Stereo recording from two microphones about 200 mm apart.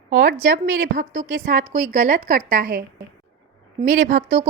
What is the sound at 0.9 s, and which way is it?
A woman's voice, 40° right (ahead or behind).